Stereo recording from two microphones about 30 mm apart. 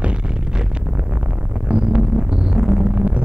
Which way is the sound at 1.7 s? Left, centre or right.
Right.